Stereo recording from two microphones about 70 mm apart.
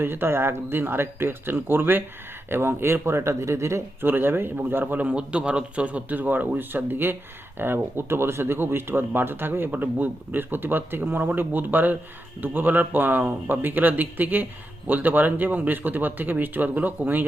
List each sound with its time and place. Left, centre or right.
0.0 s speech: right